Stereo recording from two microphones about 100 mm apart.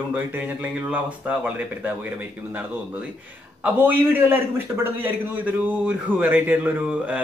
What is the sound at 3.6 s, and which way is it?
A man's voice, 20° right (ahead or behind).